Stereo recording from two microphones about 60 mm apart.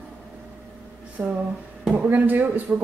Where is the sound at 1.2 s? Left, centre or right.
Right.